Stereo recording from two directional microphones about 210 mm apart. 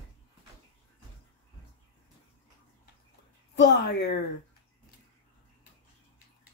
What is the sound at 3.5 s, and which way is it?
Speech, 55° left (ahead or behind).